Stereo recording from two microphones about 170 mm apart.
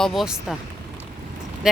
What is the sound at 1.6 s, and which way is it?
Speech, 5° right (ahead or behind).